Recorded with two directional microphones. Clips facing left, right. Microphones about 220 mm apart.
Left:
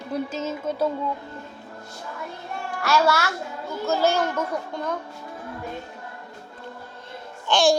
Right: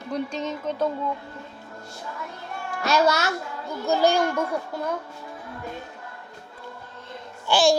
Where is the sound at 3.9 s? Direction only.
15° right (ahead or behind).